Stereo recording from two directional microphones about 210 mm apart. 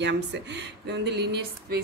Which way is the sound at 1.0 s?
55° right (ahead or behind).